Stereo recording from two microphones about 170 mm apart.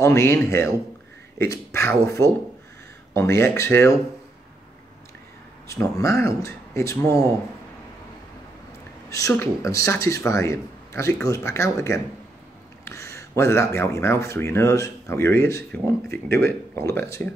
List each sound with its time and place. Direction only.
0.0 s speech: 15° left (ahead or behind)
5.7 s speech: 15° left (ahead or behind)
9.1 s speech: 15° left (ahead or behind)